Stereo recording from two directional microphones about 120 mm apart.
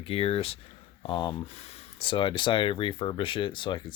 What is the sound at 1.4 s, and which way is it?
Speech, 60° left (ahead or behind).